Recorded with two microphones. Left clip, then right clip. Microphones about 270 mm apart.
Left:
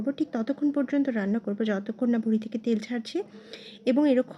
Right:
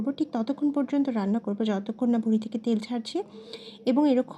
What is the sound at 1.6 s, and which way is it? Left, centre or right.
Speech, left.